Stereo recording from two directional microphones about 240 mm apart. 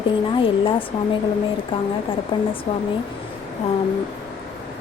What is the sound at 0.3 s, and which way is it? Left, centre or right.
Speech, left.